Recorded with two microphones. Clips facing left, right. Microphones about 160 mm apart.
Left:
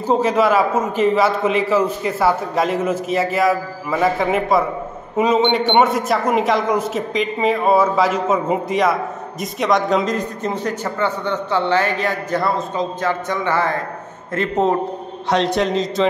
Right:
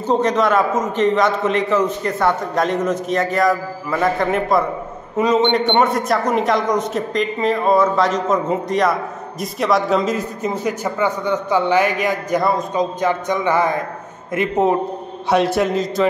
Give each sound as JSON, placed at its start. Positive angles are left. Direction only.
{"t": 0.0, "sound": "a man's voice", "side_deg": 5}